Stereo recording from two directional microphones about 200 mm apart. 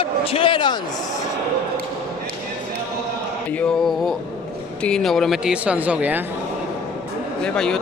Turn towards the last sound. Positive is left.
turn(degrees=5)  # may be behind; listen again after turning